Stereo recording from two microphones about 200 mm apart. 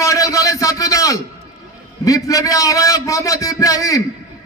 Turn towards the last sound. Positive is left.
turn(degrees=15)  # may be behind; listen again after turning